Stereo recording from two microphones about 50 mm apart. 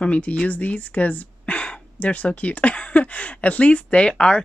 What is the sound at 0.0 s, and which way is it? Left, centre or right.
Speech, left.